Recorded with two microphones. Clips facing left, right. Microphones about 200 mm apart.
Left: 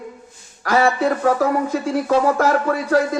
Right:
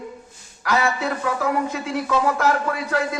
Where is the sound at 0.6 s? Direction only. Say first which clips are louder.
Left 5 dB; 45° left (ahead or behind).